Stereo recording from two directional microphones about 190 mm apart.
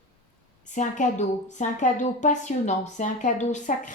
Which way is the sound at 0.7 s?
40° left (ahead or behind).